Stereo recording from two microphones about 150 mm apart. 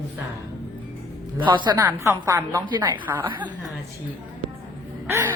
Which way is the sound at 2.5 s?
30° right (ahead or behind).